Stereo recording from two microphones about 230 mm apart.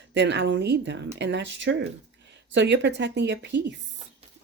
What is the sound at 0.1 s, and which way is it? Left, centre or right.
Speech, right.